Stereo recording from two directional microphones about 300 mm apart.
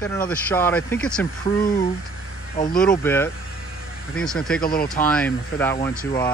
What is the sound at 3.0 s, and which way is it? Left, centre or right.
Speech, centre.